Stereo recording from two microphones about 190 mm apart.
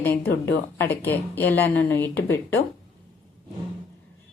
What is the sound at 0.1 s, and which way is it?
Speech, 60° left (ahead or behind).